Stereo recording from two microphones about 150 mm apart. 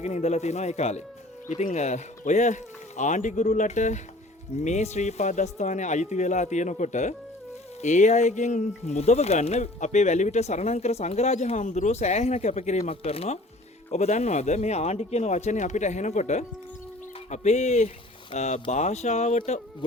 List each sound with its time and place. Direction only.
0.0 s speech: 50° left (ahead or behind)